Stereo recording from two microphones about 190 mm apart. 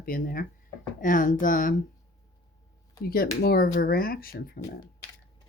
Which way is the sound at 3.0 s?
50° left (ahead or behind).